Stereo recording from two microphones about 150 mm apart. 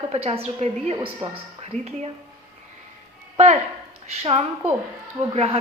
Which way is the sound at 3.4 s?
50° right (ahead or behind).